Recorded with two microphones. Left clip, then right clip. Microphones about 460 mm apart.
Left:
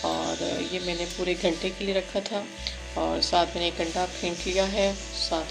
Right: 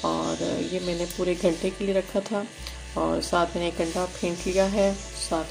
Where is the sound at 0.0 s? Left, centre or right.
Left.